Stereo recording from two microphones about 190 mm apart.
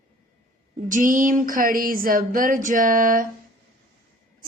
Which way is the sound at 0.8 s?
45° right (ahead or behind).